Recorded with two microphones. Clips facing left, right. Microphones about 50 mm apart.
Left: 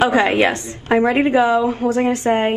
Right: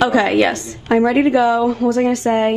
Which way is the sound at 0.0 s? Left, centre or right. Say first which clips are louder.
Right 1 dB; left.